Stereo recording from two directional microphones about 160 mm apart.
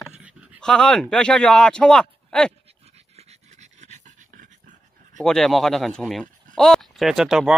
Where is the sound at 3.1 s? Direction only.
45° right (ahead or behind).